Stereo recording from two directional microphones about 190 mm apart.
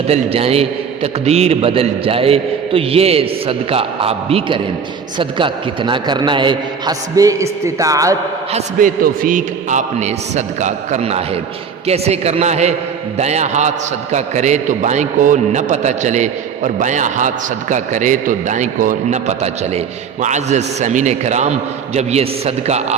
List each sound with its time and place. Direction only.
0.1 s a man's voice: 30° right (ahead or behind)
8.5 s a man's voice: 45° right (ahead or behind)